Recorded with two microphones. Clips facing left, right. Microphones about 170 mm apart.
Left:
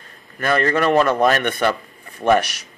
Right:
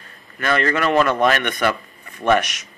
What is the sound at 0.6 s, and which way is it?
A man's voice, 35° left (ahead or behind).